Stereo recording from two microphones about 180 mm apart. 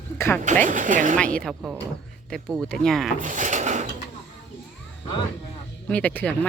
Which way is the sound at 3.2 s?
45° right (ahead or behind).